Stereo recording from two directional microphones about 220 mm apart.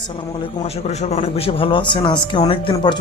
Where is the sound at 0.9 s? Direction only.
25° left (ahead or behind).